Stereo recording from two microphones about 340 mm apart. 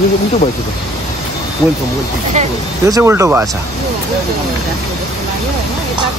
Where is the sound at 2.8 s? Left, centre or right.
Centre.